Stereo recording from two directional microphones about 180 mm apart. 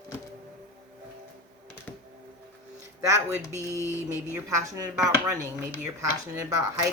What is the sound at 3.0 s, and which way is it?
Speech, 15° right (ahead or behind).